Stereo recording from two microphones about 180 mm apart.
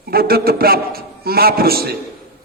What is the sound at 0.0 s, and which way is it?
A man's voice, 55° right (ahead or behind).